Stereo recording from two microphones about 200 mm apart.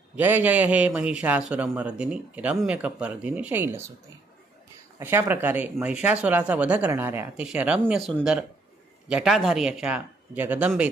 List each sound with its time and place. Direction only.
0.1 s a man's voice: 10° right (ahead or behind)
4.9 s a man's voice: 10° right (ahead or behind)